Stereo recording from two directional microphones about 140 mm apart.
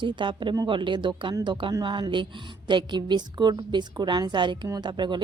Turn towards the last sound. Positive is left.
turn(degrees=-35)  # may be behind; listen again after turning